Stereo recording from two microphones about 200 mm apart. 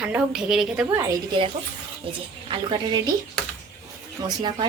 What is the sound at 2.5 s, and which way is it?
Speech, 25° right (ahead or behind).